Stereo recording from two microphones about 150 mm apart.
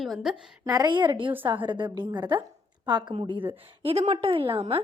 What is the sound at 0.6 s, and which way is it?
A woman's voice, 25° right (ahead or behind).